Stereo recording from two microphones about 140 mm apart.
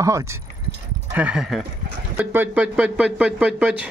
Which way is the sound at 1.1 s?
10° right (ahead or behind).